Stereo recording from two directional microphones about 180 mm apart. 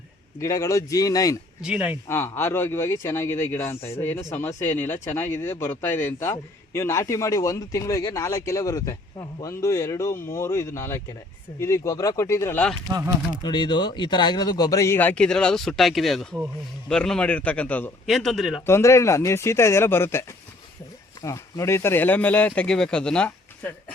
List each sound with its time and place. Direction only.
0.3 s speech: 15° left (ahead or behind)
1.6 s speech: 5° right (ahead or behind)
2.0 s speech: 10° left (ahead or behind)
13.4 s a man's voice: 25° left (ahead or behind); by 18.6 s centre (ahead or behind)
18.6 s speech: 15° left (ahead or behind)